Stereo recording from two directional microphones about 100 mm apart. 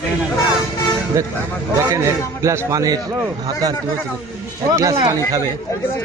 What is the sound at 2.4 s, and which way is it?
Speech, 30° right (ahead or behind).